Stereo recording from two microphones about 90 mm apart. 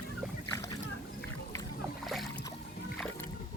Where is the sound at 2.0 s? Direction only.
Centre (ahead or behind).